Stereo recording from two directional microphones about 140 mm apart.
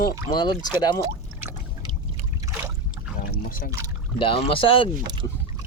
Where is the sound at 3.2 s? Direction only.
80° left.